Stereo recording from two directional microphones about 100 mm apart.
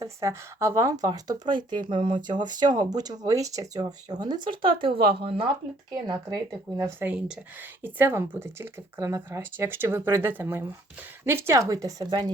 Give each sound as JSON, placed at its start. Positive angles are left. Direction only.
{"t": 0.0, "sound": "speech", "side_deg": -30}
{"t": 5.9, "sound": "a woman's voice", "side_deg": -40}
{"t": 6.7, "sound": "speech", "side_deg": -25}
{"t": 7.1, "sound": "speech", "side_deg": -15}
{"t": 11.5, "sound": "a woman's voice", "side_deg": -35}